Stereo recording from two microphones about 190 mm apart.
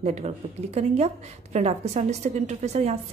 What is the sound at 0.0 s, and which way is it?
A woman's voice, 35° right (ahead or behind).